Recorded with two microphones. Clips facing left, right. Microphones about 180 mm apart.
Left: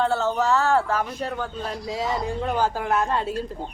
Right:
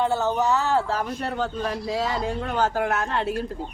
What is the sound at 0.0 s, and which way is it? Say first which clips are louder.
Speech: even; 15° right (ahead or behind).